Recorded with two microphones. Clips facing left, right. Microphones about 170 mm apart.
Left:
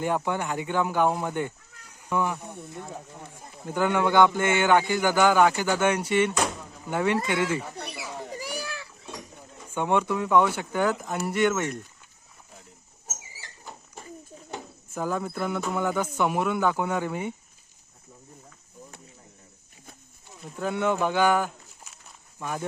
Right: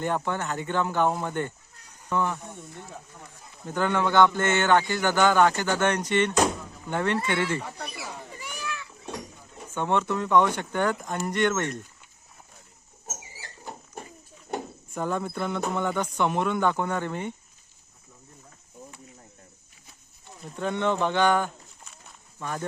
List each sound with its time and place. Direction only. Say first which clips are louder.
0.0 s a man's voice: left 1 dB; 10° left (ahead or behind)
3.6 s a man's voice: left 1 dB; 10° left (ahead or behind)
8.3 s children playing: left 3 dB; 35° left (ahead or behind)
9.7 s a man's voice: left 1 dB; 10° left (ahead or behind)
14.9 s a man's voice: even; 5° left (ahead or behind)
20.4 s speech: even; 5° left (ahead or behind)